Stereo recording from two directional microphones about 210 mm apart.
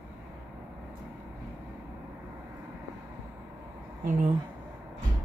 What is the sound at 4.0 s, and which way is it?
Speech, 40° right (ahead or behind).